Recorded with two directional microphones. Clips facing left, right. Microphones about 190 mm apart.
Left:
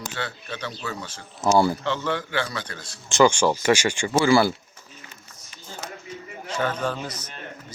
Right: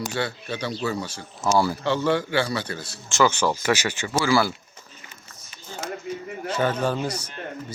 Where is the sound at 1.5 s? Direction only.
20° left (ahead or behind).